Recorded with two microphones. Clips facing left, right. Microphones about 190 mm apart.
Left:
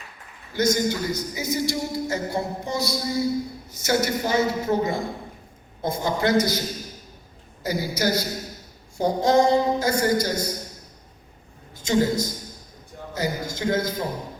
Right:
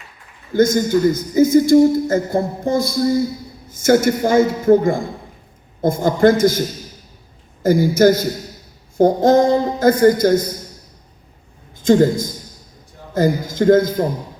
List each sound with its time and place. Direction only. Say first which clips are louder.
0.5 s a man's voice: right 8 dB; 50° right (ahead or behind)
7.6 s a man's voice: right 12 dB; 50° right (ahead or behind)
11.9 s a man's voice: right 8 dB; 50° right (ahead or behind)